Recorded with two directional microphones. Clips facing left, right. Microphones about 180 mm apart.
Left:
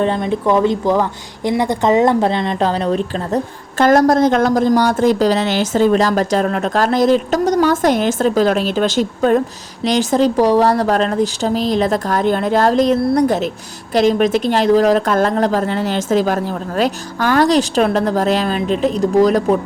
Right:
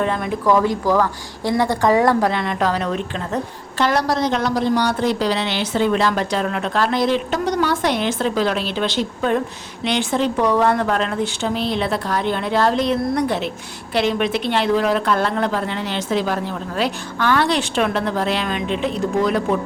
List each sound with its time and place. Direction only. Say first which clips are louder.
0.0 s speech: left 4 dB; 30° left (ahead or behind)